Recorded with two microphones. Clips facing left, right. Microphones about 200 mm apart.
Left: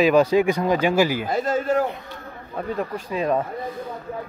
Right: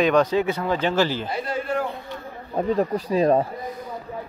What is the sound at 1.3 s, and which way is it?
Speech, 45° left (ahead or behind).